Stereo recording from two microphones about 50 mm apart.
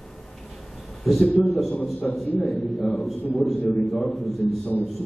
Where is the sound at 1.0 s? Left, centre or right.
Centre.